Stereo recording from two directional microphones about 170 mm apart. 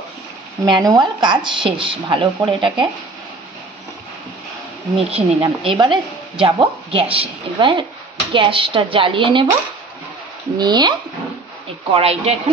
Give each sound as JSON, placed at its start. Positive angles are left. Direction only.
{"t": 0.7, "sound": "speech", "side_deg": -25}
{"t": 4.9, "sound": "speech", "side_deg": -30}
{"t": 10.6, "sound": "speech", "side_deg": -25}
{"t": 11.9, "sound": "speech", "side_deg": -35}